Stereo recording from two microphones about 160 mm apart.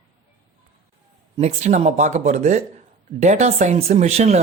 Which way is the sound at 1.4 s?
40° right (ahead or behind).